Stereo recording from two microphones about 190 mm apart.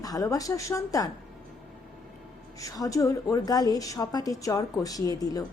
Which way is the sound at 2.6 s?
20° left (ahead or behind).